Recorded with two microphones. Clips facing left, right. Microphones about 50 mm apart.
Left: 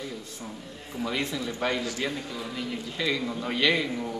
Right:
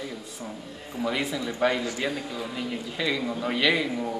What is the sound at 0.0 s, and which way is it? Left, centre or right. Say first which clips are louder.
Speech: right 1 dB; centre.